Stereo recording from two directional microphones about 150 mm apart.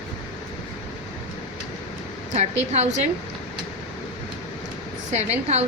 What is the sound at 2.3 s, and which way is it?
Speech, 50° right (ahead or behind).